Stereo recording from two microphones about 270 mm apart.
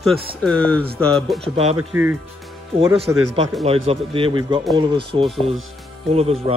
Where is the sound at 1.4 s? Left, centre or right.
Right.